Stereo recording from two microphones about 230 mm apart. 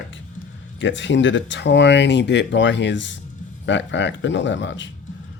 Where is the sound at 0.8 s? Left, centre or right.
Left.